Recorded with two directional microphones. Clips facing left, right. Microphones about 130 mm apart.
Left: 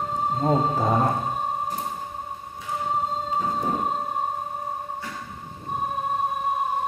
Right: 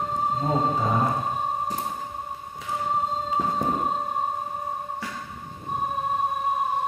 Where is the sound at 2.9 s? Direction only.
Centre (ahead or behind).